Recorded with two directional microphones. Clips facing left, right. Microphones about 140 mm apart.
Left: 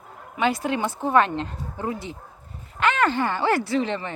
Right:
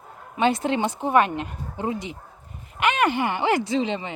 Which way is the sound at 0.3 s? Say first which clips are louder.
Right 2 dB; 25° right (ahead or behind).